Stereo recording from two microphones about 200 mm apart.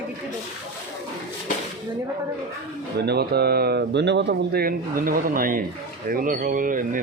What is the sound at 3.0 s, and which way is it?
Speech, 55° right (ahead or behind).